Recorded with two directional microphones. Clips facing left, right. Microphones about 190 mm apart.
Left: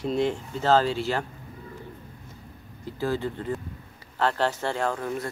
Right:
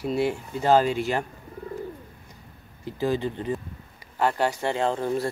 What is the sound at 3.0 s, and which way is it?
Speech, 15° right (ahead or behind).